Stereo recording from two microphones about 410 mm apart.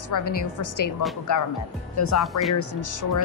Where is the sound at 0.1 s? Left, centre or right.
Left.